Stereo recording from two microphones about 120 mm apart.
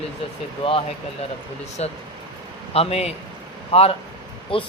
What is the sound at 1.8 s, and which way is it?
A man's voice, 65° left (ahead or behind).